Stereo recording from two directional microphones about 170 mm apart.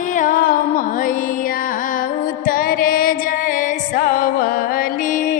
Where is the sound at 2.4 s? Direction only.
60° left (ahead or behind).